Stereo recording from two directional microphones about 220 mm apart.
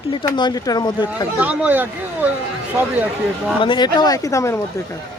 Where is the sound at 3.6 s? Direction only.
20° left (ahead or behind).